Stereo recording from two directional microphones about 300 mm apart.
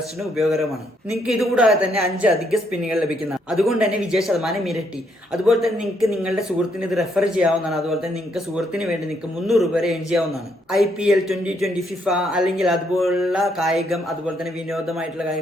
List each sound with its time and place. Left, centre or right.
0.3 s a man's voice: centre